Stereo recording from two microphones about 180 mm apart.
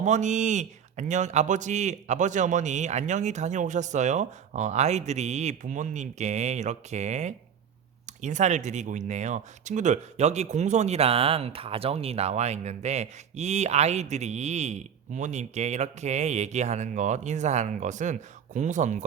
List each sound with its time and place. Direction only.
0.0 s speech: 40° right (ahead or behind)